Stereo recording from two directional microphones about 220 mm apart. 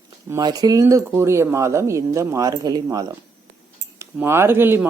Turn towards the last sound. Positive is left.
turn(degrees=-10)  # may be behind; listen again after turning